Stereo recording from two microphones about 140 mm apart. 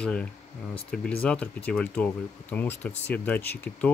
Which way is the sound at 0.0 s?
5° left (ahead or behind).